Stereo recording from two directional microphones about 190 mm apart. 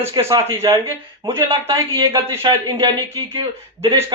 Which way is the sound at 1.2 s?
30° right (ahead or behind).